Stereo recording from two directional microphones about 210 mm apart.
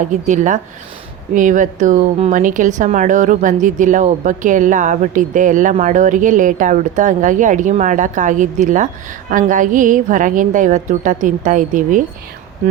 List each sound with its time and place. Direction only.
0.0 s speech: 35° right (ahead or behind)